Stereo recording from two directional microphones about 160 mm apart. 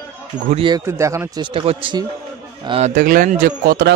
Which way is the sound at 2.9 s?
60° right (ahead or behind).